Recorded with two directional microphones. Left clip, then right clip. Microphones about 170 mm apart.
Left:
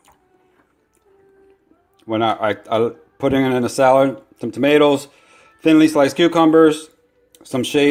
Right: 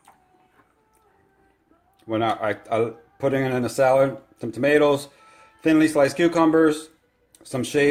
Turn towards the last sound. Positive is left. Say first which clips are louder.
# left 4 dB
turn(degrees=35)  # may be behind; listen again after turning